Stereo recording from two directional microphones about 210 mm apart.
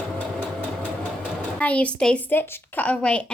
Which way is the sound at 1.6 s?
5° left (ahead or behind).